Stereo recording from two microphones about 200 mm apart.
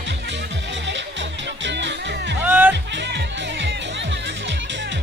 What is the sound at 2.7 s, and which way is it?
Music, 60° right (ahead or behind).